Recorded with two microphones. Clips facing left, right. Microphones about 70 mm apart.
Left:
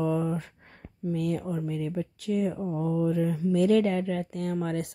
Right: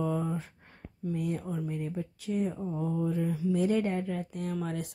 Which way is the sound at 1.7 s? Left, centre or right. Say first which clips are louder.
Left 4 dB; left.